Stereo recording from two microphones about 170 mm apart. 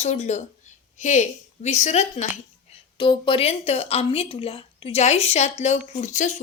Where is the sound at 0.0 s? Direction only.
40° left (ahead or behind).